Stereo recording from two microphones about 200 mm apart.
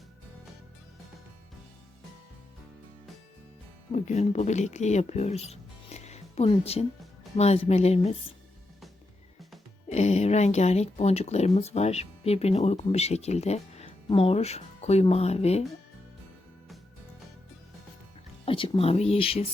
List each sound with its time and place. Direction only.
3.9 s speech: 35° left (ahead or behind)
9.9 s speech: 35° left (ahead or behind)
18.4 s speech: 25° left (ahead or behind)